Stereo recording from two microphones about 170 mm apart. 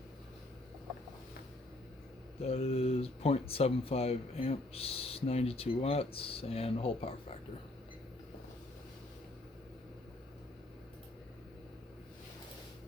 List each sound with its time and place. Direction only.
2.4 s speech: 35° left (ahead or behind)